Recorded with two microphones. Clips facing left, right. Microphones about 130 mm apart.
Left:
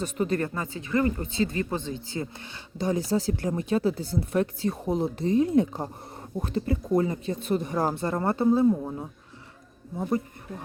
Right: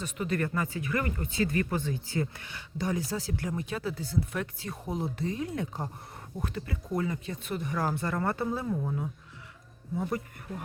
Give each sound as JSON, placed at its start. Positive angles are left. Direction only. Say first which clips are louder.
{"t": 0.0, "sound": "speech", "louder": "left 5 dB", "side_deg": 35}